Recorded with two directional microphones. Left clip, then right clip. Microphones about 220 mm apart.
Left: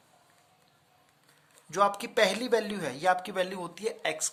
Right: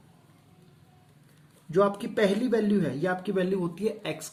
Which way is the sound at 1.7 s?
50° left (ahead or behind).